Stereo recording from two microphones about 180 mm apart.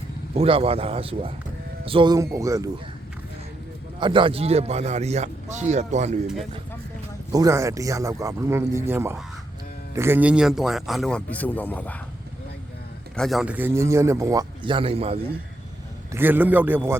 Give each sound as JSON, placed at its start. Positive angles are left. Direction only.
{"t": 0.3, "sound": "speech", "side_deg": -30}
{"t": 4.0, "sound": "speech", "side_deg": -25}
{"t": 7.3, "sound": "speech", "side_deg": -15}
{"t": 13.1, "sound": "speech", "side_deg": 0}
{"t": 16.1, "sound": "speech", "side_deg": -10}